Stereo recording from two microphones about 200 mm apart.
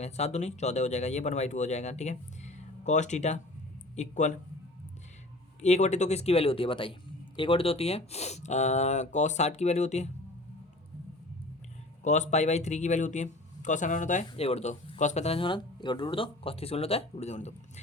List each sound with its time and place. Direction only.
0.0 s speech: 35° left (ahead or behind)
5.6 s speech: 35° left (ahead or behind)
12.0 s speech: 35° left (ahead or behind)